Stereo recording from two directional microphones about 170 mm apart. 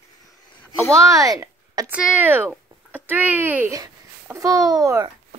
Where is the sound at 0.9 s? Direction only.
20° right (ahead or behind).